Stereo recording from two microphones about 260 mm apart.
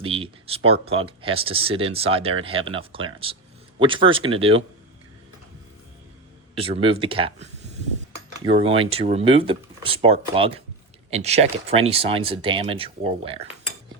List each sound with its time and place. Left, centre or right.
0.0 s speech: right
6.6 s speech: right
8.4 s speech: right